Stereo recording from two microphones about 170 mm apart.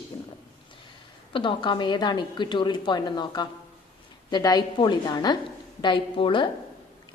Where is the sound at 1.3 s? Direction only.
30° left (ahead or behind).